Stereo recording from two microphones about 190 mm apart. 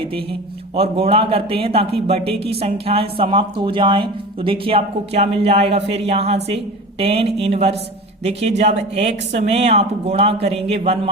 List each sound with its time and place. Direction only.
0.8 s a woman's voice: 30° right (ahead or behind)